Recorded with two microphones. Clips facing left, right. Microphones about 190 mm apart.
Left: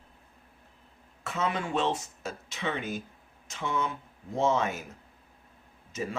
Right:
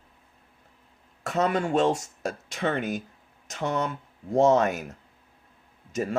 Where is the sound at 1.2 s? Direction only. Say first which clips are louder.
Right 6 dB; 45° right (ahead or behind).